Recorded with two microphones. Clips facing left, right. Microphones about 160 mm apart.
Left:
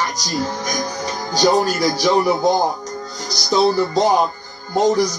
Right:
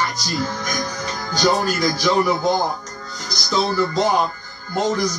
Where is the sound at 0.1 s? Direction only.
40° left (ahead or behind).